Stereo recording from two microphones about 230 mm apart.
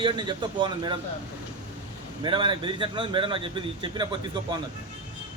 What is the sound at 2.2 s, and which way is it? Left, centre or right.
A man's voice, right.